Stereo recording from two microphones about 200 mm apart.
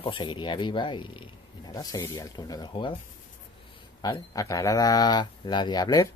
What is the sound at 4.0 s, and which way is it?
Speech, 15° left (ahead or behind).